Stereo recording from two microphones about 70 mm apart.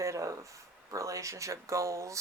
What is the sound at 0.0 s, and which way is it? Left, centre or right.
Speech, right.